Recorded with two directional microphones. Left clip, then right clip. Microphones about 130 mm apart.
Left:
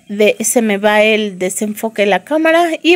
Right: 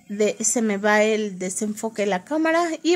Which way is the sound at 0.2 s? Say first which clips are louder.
Left 10 dB; 30° left (ahead or behind).